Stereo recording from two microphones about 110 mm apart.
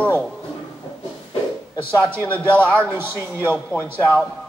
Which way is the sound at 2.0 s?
20° right (ahead or behind).